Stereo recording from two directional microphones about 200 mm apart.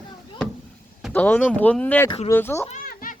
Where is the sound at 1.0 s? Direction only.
5° left (ahead or behind).